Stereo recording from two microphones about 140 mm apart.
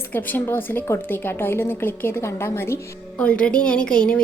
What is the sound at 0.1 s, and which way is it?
A woman's voice, 15° left (ahead or behind).